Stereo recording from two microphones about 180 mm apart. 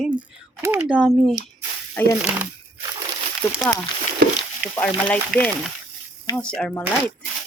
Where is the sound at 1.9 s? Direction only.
10° left (ahead or behind).